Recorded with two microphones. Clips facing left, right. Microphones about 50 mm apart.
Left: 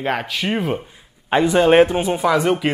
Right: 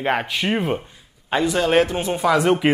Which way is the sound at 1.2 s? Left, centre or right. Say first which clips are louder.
Left 5 dB; left.